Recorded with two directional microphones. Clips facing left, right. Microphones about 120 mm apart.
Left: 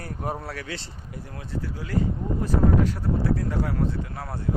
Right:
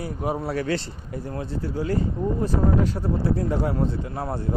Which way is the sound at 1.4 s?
30° right (ahead or behind).